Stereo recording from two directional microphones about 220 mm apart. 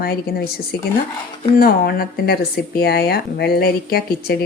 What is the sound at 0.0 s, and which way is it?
Speech, 45° left (ahead or behind).